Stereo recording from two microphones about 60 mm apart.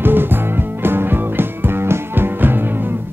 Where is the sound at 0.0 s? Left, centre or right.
Right.